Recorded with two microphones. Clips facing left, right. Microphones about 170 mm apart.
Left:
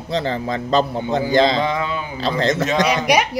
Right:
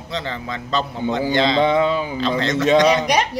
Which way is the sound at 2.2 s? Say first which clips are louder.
Left 1 dB; 35° left (ahead or behind).